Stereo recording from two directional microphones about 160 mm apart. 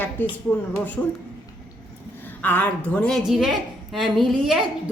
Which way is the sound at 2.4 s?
10° left (ahead or behind).